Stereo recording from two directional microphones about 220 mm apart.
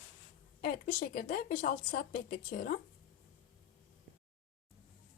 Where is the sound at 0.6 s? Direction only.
40° left (ahead or behind).